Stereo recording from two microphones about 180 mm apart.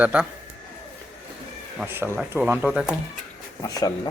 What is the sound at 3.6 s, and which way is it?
Speech, 20° left (ahead or behind).